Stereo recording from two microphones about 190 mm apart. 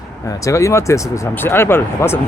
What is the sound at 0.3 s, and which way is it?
Speech, 15° left (ahead or behind).